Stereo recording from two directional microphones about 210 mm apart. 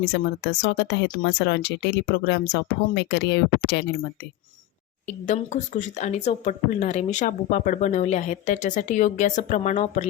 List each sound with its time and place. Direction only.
0.0 s speech: 50° left (ahead or behind)
5.0 s speech: 35° left (ahead or behind)